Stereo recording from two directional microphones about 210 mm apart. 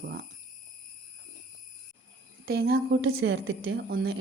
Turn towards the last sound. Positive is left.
turn(degrees=-50)  # may be behind; listen again after turning